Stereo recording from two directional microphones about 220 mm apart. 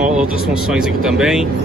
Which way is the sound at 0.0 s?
5° right (ahead or behind).